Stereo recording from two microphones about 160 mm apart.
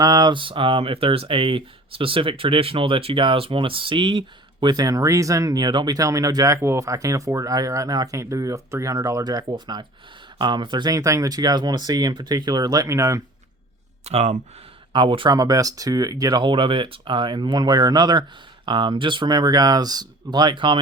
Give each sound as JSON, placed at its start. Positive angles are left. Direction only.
{"t": 0.0, "sound": "speech", "side_deg": -25}
{"t": 14.0, "sound": "speech", "side_deg": -40}
{"t": 14.9, "sound": "speech", "side_deg": -30}